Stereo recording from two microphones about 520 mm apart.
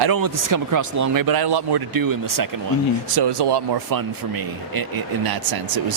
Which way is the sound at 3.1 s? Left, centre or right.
Right.